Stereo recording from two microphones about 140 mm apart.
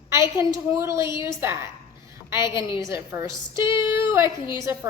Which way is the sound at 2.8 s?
20° right (ahead or behind).